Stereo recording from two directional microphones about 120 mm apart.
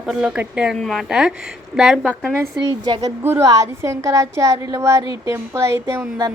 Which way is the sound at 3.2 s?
20° right (ahead or behind).